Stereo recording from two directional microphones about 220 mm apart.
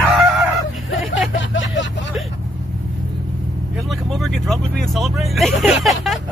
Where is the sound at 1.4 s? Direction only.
55° left (ahead or behind).